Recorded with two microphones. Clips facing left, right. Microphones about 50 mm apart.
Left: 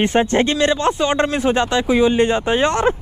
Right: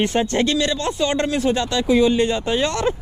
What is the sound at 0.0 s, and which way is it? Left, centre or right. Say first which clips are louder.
Speech: left 3 dB; left.